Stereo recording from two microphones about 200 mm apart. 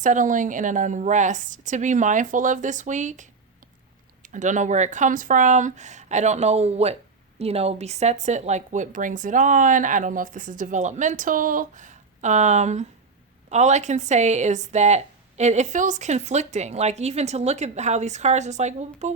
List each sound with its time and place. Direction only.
0.0 s speech: 40° right (ahead or behind)
4.3 s speech: 40° right (ahead or behind)